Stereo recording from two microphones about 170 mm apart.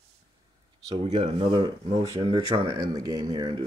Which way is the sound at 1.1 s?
30° right (ahead or behind).